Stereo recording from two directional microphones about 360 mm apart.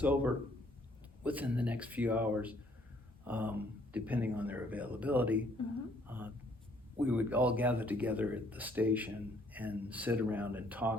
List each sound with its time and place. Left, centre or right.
0.0 s speech: centre